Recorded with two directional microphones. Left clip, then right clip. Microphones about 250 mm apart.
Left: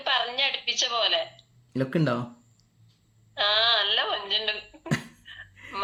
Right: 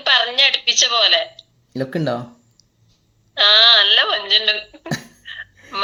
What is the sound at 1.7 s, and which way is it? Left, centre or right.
Speech, centre.